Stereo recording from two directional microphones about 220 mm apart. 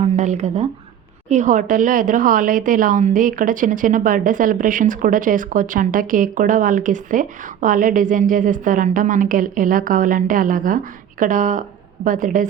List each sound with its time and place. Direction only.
0.0 s a woman's voice: 30° right (ahead or behind)